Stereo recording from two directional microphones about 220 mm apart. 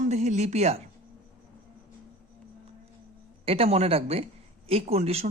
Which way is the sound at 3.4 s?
25° right (ahead or behind).